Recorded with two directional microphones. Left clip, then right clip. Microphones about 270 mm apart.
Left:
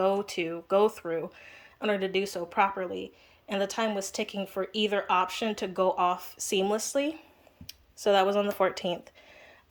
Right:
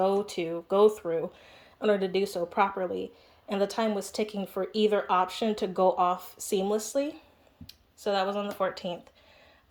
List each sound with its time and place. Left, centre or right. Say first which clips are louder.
0.0 s speech: even; centre